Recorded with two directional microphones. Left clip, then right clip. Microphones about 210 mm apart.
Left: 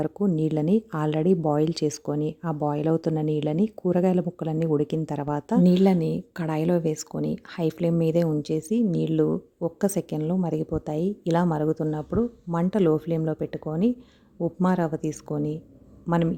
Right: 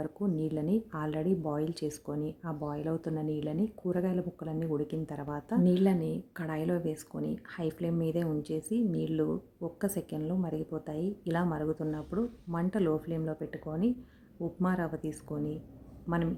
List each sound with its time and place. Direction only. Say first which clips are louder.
0.0 s speech: left 9 dB; 35° left (ahead or behind)